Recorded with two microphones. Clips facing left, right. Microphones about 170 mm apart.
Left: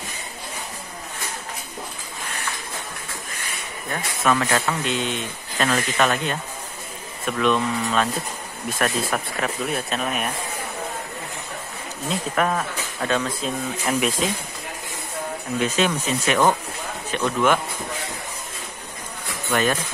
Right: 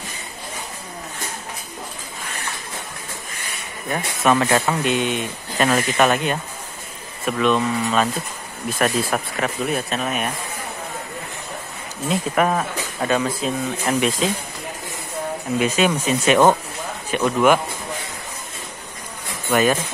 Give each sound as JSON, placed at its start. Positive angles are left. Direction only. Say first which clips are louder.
{"t": 3.9, "sound": "speech", "louder": "right 3 dB", "side_deg": -20}
{"t": 4.8, "sound": "speech", "louder": "right 4 dB", "side_deg": -15}
{"t": 7.2, "sound": "speech", "louder": "right 2 dB", "side_deg": -5}
{"t": 12.1, "sound": "speech", "louder": "right 3 dB", "side_deg": -10}
{"t": 15.6, "sound": "speech", "louder": "right 3 dB", "side_deg": -10}
{"t": 19.5, "sound": "speech", "louder": "right 4 dB", "side_deg": -10}